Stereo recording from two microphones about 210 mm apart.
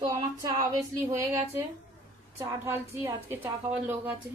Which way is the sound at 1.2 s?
10° right (ahead or behind).